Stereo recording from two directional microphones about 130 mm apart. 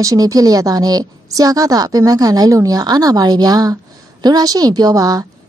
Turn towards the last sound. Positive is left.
turn(degrees=-30)  # may be behind; listen again after turning